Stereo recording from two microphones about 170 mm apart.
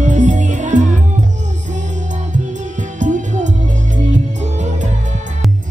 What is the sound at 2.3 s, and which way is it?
Music, 45° right (ahead or behind).